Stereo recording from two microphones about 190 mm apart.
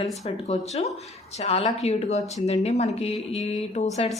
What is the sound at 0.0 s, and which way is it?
Speech, 35° left (ahead or behind).